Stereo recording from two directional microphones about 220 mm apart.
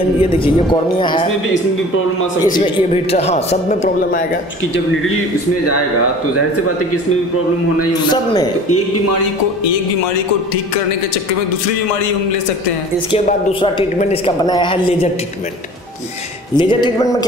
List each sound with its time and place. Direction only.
0.2 s a woman's voice: 20° left (ahead or behind)
2.4 s a woman's voice: 20° left (ahead or behind)
7.9 s a man's voice: 20° left (ahead or behind)
13.1 s a woman's voice: 25° left (ahead or behind)
16.5 s a woman's voice: 20° left (ahead or behind)